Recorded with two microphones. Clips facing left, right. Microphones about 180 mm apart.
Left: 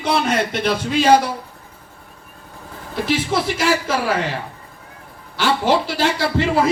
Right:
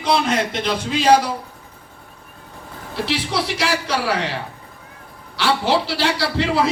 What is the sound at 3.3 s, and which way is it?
Speech, 45° left (ahead or behind).